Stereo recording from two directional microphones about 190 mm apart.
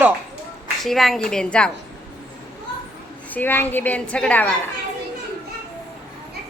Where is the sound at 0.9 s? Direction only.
Centre (ahead or behind).